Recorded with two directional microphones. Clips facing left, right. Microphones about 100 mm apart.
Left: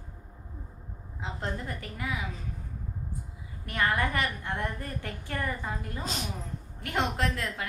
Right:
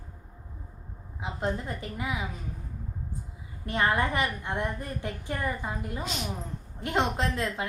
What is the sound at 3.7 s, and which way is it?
A woman's voice, 25° right (ahead or behind).